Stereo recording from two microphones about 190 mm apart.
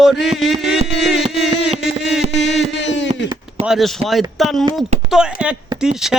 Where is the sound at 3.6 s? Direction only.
Centre (ahead or behind).